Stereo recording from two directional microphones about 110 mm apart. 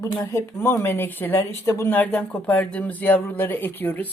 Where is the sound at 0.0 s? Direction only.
30° left (ahead or behind).